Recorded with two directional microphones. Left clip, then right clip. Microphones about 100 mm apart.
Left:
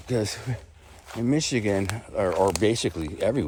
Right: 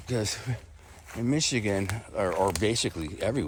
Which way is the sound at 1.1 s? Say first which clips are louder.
Left 3 dB; 35° left (ahead or behind).